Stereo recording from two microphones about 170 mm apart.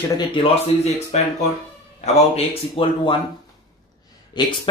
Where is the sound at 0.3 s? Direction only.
35° left (ahead or behind).